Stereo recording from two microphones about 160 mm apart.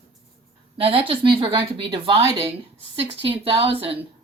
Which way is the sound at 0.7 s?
35° right (ahead or behind).